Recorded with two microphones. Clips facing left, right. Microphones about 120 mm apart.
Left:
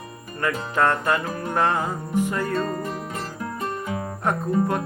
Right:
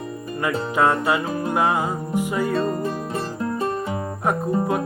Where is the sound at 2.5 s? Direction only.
25° right (ahead or behind).